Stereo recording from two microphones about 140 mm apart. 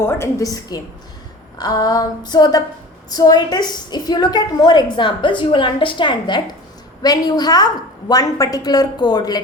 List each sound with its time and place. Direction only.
0.0 s a woman's voice: 20° left (ahead or behind)